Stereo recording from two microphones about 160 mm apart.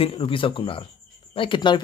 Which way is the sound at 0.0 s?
35° left (ahead or behind).